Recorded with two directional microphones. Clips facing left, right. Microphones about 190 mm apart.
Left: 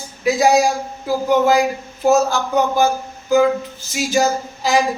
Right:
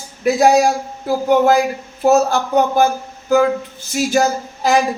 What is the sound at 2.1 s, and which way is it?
Speech, 55° right (ahead or behind).